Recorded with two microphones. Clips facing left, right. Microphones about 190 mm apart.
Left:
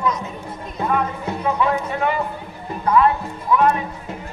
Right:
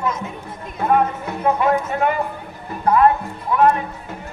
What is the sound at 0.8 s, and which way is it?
Music, 50° right (ahead or behind).